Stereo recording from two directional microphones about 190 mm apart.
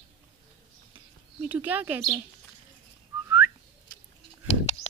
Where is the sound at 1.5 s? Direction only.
10° right (ahead or behind).